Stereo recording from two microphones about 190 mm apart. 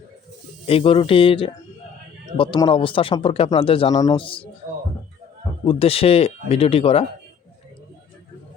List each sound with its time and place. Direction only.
0.7 s speech: 30° left (ahead or behind)
5.6 s speech: 30° left (ahead or behind)